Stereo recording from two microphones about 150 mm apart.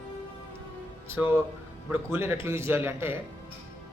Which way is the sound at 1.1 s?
15° right (ahead or behind).